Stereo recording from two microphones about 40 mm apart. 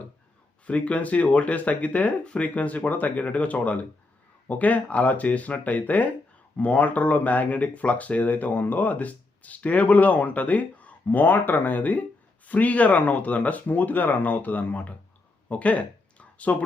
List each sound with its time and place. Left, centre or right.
0.7 s speech: left
11.2 s speech: left
15.4 s a sound: left